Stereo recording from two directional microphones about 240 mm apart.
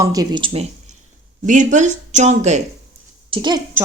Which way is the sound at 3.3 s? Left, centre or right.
Centre.